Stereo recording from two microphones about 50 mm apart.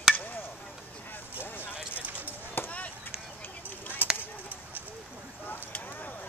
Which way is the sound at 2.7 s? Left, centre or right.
Left.